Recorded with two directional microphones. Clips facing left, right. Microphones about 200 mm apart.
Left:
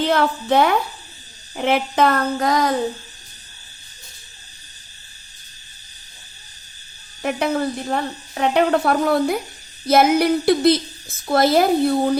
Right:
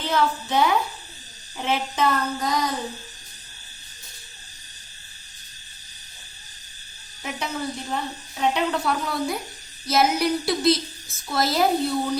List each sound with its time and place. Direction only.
0.0 s speech: 65° left (ahead or behind)
7.2 s speech: 60° left (ahead or behind)